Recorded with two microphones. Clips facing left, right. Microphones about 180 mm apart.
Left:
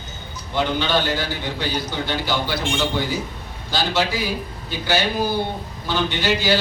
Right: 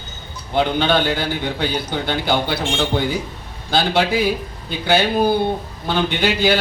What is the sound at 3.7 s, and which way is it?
A man's voice, 60° right (ahead or behind).